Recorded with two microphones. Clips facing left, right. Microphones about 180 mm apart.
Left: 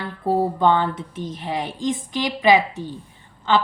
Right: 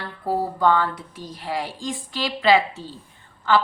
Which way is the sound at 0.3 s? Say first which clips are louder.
Left 2 dB; 20° left (ahead or behind).